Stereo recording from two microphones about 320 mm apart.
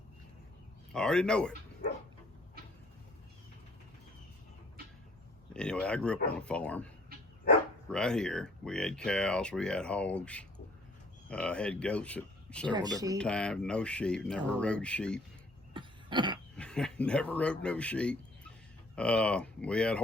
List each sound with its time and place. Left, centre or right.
0.9 s speech: centre
5.5 s speech: centre
15.7 s a sound: centre
16.6 s speech: centre